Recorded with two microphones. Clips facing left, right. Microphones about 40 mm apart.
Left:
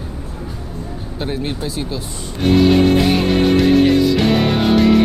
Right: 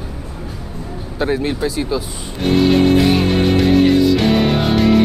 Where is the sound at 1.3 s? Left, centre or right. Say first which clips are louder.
Right 4 dB; centre.